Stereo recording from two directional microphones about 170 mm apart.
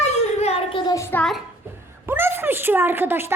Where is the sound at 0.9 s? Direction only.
15° left (ahead or behind).